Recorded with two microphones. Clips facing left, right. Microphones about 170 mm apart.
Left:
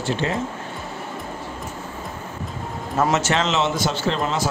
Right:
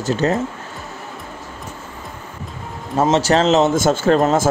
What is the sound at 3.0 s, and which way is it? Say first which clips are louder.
A man's voice: right 5 dB; 30° right (ahead or behind).